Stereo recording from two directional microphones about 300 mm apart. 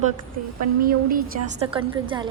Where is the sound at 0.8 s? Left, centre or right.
Right.